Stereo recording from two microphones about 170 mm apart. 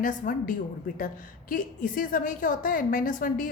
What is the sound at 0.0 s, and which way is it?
A woman's voice, 50° left (ahead or behind).